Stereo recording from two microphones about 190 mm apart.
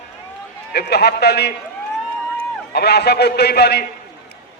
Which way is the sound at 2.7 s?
60° left (ahead or behind).